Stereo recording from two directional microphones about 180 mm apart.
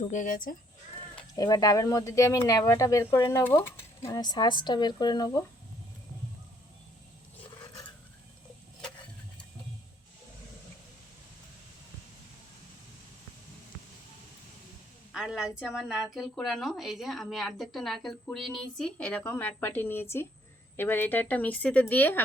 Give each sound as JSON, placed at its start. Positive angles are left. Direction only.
{"t": 0.0, "sound": "speech", "side_deg": 45}
{"t": 1.4, "sound": "speech", "side_deg": 20}
{"t": 15.1, "sound": "a woman's voice", "side_deg": -5}